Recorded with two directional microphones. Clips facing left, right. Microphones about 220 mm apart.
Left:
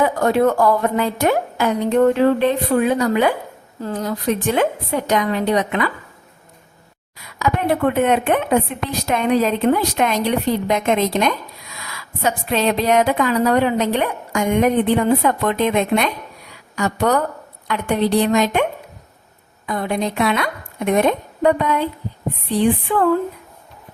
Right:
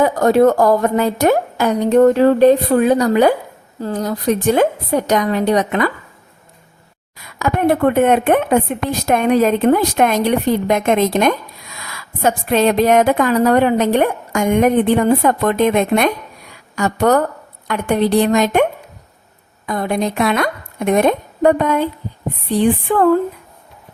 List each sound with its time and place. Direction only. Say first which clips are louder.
0.0 s a woman's voice: right 4 dB; 40° right (ahead or behind)
7.2 s a woman's voice: right 3 dB; 50° right (ahead or behind)
19.6 s a woman's voice: right 3 dB; 45° right (ahead or behind)